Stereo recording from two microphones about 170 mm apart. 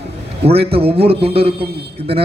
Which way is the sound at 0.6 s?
35° right (ahead or behind).